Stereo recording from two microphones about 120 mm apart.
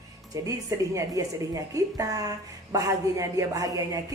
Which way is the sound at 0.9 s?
25° right (ahead or behind).